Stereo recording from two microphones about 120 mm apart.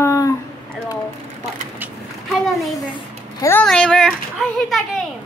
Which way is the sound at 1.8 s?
15° right (ahead or behind).